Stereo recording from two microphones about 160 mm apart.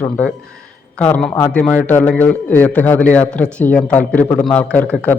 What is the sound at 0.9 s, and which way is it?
A man's voice, 10° left (ahead or behind).